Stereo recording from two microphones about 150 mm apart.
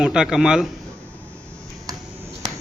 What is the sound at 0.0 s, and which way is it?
Speech, 5° right (ahead or behind).